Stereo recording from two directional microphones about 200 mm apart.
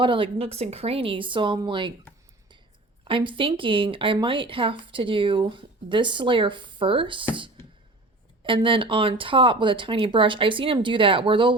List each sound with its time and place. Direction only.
0.0 s speech: 25° right (ahead or behind)
3.0 s speech: 25° right (ahead or behind)
8.4 s speech: 25° right (ahead or behind)